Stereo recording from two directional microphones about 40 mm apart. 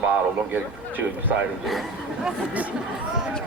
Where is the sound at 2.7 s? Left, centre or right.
Centre.